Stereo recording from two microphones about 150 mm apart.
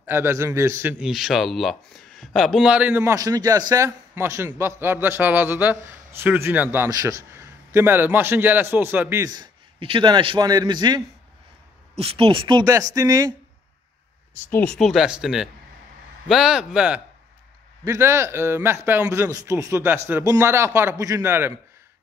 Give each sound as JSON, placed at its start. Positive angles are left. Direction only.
{"t": 0.0, "sound": "a man's voice", "side_deg": -15}
{"t": 9.2, "sound": "a man's voice", "side_deg": -30}
{"t": 12.0, "sound": "a man's voice", "side_deg": -40}
{"t": 14.5, "sound": "speech", "side_deg": 5}
{"t": 17.8, "sound": "a man's voice", "side_deg": -20}